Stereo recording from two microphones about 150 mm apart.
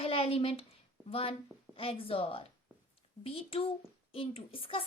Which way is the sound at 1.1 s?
40° left (ahead or behind).